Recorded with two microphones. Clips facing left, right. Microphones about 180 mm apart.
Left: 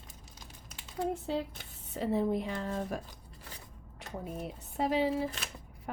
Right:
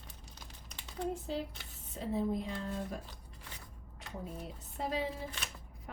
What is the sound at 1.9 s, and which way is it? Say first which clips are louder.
Speech: left 4 dB; 70° left (ahead or behind).